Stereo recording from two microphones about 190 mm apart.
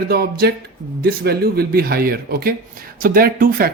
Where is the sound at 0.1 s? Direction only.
55° right (ahead or behind).